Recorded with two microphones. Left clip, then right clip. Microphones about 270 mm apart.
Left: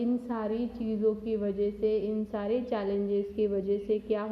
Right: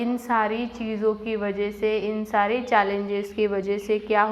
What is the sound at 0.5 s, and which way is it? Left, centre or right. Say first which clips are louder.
Speech: right 4 dB; right.